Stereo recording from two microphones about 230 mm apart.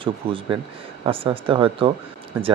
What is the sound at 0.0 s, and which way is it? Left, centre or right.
Speech, right.